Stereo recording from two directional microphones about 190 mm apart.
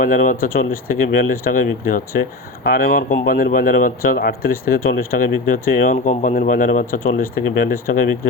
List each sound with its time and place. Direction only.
0.0 s speech: 45° left (ahead or behind)